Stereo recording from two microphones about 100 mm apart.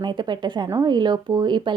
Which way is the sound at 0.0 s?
50° right (ahead or behind).